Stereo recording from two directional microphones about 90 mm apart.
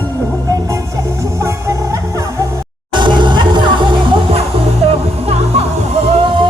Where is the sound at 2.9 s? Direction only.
60° right (ahead or behind).